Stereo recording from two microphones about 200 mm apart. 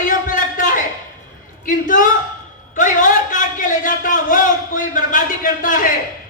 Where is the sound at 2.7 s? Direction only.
40° left (ahead or behind).